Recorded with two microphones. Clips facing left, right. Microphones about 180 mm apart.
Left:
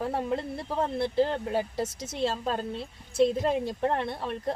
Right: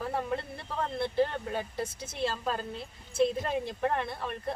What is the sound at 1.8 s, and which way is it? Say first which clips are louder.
Speech: left 4 dB; 80° left.